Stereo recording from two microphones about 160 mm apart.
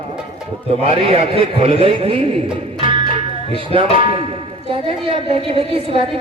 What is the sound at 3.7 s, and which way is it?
A woman's voice, 35° right (ahead or behind).